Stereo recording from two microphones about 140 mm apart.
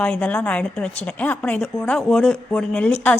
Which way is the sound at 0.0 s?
10° left (ahead or behind).